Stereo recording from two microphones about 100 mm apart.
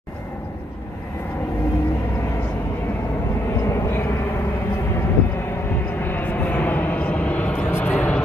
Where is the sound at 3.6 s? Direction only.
25° left (ahead or behind).